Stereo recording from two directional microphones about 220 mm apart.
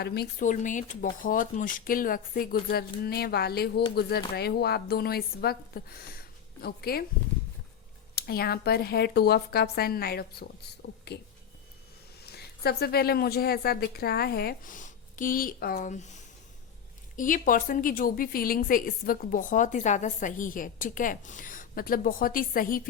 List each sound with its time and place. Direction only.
0.0 s a woman's voice: 45° left (ahead or behind)
8.1 s a woman's voice: 45° left (ahead or behind)
12.2 s a woman's voice: 45° left (ahead or behind)
17.2 s a woman's voice: 40° left (ahead or behind)